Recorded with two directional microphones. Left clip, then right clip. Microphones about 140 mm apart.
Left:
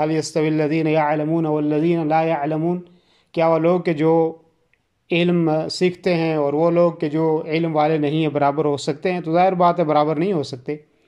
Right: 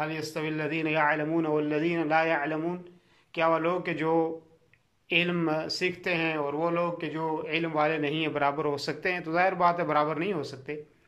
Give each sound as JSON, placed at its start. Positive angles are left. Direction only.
{"t": 0.0, "sound": "speech", "side_deg": 50}